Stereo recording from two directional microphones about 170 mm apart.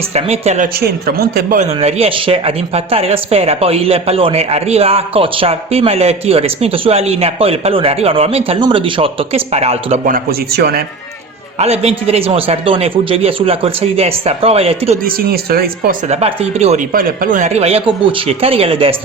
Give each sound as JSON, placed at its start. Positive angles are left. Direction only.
{"t": 0.1, "sound": "speech", "side_deg": -40}
{"t": 0.8, "sound": "speech", "side_deg": -65}
{"t": 1.8, "sound": "speech", "side_deg": -35}
{"t": 10.1, "sound": "speech", "side_deg": -65}
{"t": 11.6, "sound": "speech", "side_deg": -35}
{"t": 15.0, "sound": "speech", "side_deg": -60}
{"t": 16.0, "sound": "speech", "side_deg": -35}
{"t": 16.9, "sound": "speech", "side_deg": -55}